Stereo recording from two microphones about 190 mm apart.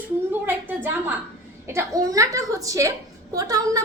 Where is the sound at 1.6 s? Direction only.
15° right (ahead or behind).